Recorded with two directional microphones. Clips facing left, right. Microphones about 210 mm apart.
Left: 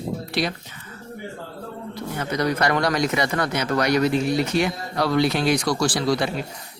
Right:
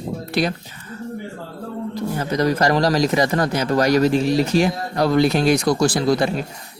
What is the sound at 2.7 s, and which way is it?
Speech, 35° right (ahead or behind).